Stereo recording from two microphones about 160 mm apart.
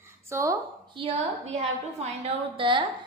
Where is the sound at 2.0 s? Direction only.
40° right (ahead or behind).